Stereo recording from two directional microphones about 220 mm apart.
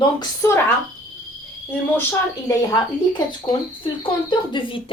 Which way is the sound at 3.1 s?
20° left (ahead or behind).